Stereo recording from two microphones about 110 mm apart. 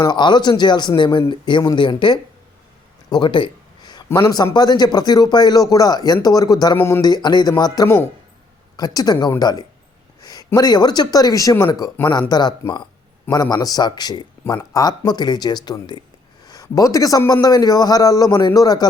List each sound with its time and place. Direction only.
0.0 s speech: 45° left (ahead or behind)
3.1 s a sound: 45° left (ahead or behind)
4.1 s speech: 30° left (ahead or behind)
6.7 s speech: 20° left (ahead or behind)
7.0 s speech: 40° left (ahead or behind)